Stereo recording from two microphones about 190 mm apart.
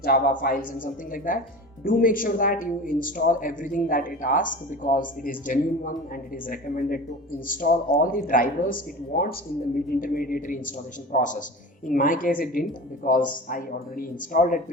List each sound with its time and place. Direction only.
0.0 s a man's voice: 50° left (ahead or behind)